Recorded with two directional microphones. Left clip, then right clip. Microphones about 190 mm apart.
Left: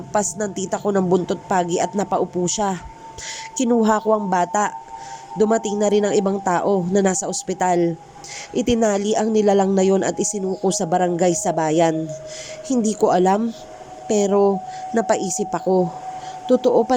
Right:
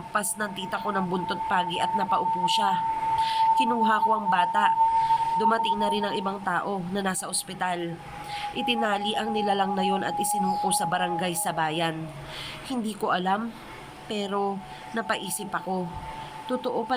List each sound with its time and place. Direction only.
0.1 s a man's voice: 35° left (ahead or behind)